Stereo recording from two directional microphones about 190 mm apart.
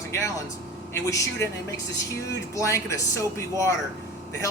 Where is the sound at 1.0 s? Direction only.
15° left (ahead or behind).